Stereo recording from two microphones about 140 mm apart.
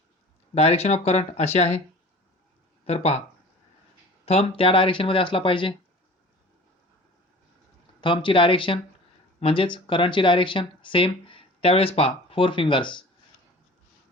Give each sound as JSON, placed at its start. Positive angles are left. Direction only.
{"t": 0.5, "sound": "speech", "side_deg": 50}
{"t": 2.8, "sound": "speech", "side_deg": 50}
{"t": 4.3, "sound": "speech", "side_deg": 45}
{"t": 8.0, "sound": "speech", "side_deg": 35}